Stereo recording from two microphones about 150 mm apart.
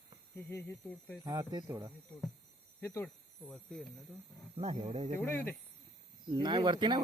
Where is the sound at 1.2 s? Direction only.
25° right (ahead or behind).